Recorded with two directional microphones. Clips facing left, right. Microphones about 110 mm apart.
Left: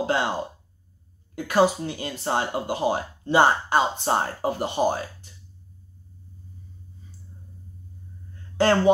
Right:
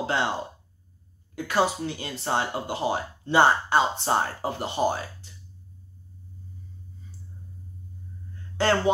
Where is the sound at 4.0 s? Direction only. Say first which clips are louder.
Left 1 dB; 45° left (ahead or behind).